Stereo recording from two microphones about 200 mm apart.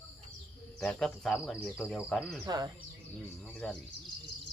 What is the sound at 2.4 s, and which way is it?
Speech, 20° right (ahead or behind).